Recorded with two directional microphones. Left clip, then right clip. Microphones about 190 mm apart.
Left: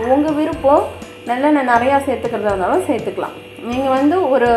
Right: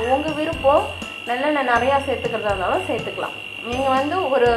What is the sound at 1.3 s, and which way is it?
Speech, 40° left (ahead or behind).